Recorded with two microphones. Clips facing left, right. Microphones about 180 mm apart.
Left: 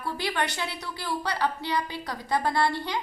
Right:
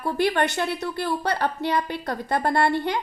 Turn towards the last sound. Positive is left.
turn(degrees=-55)  # may be behind; listen again after turning